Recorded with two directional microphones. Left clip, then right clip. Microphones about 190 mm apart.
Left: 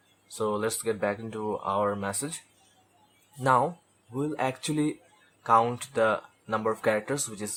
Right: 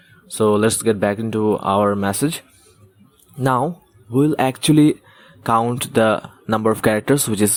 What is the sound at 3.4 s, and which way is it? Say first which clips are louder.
Speech: right 5 dB; 40° right (ahead or behind).